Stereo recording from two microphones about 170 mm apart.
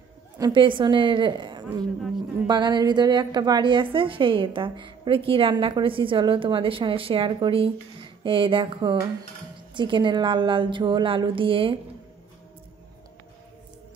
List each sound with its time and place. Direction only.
0.4 s a woman's voice: 30° right (ahead or behind)